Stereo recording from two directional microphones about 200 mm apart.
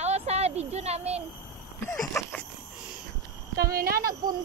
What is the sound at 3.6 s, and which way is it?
Speech, 50° right (ahead or behind).